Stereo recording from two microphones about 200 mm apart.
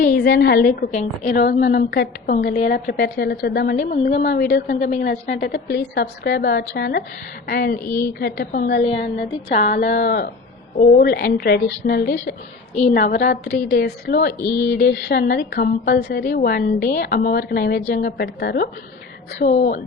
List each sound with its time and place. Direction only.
0.3 s a woman's voice: 50° left (ahead or behind)
19.5 s a woman's voice: 35° left (ahead or behind)